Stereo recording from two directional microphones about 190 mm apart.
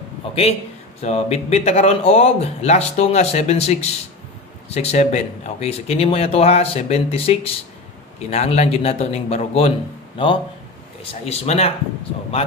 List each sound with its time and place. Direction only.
0.3 s a man's voice: 35° left (ahead or behind)